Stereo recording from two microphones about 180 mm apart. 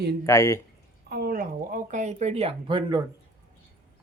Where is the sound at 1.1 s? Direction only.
55° right (ahead or behind); by 3.0 s 25° right (ahead or behind).